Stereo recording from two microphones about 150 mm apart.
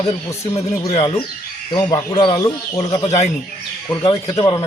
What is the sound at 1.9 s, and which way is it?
Speech, 25° left (ahead or behind).